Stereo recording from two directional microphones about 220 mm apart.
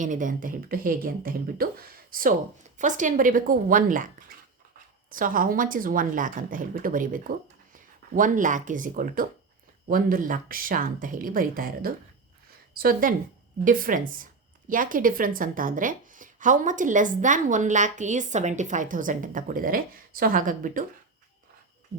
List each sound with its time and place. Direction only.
0.0 s a woman's voice: 35° right (ahead or behind)
5.1 s a woman's voice: 40° right (ahead or behind)